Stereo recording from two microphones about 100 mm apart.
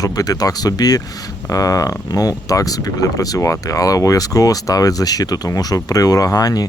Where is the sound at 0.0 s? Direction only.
40° left (ahead or behind).